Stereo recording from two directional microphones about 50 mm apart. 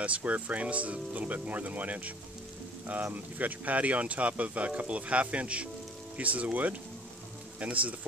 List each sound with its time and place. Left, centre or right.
0.0 s speech: right